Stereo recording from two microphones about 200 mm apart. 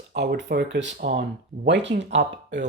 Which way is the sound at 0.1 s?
55° right (ahead or behind).